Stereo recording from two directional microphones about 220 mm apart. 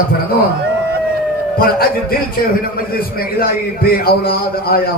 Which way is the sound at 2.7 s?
45° left (ahead or behind).